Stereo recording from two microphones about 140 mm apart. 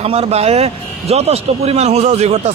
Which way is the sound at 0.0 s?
45° right (ahead or behind).